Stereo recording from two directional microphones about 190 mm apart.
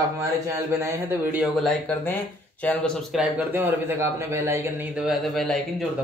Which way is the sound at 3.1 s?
10° right (ahead or behind).